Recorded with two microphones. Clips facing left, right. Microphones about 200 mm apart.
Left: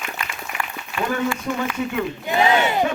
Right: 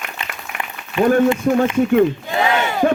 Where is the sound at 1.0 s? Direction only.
20° right (ahead or behind).